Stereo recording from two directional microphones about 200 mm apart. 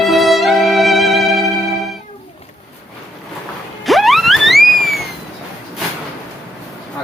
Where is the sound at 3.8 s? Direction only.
Centre (ahead or behind).